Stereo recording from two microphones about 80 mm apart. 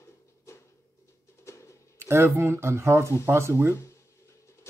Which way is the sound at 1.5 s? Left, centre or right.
Left.